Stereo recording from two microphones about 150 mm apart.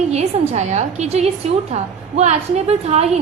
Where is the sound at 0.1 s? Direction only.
50° right (ahead or behind).